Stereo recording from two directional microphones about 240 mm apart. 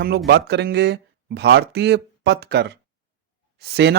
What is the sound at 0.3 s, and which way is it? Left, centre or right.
Speech, right.